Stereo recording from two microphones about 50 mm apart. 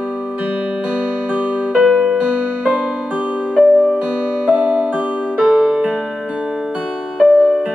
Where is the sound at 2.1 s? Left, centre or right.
Right.